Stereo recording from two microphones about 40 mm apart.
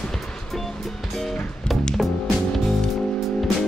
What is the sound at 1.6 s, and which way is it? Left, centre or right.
Music, left.